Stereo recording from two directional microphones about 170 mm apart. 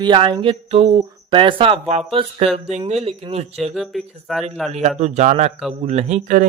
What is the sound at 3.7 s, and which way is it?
Speech, centre (ahead or behind).